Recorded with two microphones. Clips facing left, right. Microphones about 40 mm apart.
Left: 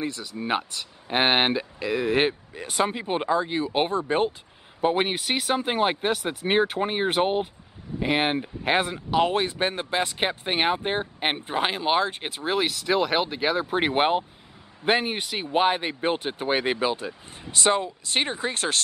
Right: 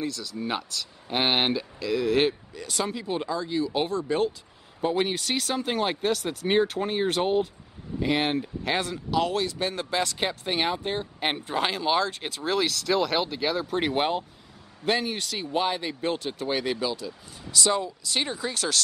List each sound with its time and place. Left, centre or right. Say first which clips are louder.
0.0 s speech: left 1 dB; left